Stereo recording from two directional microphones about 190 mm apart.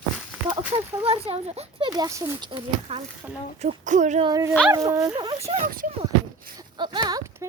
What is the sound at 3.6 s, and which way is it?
Speech, 40° right (ahead or behind).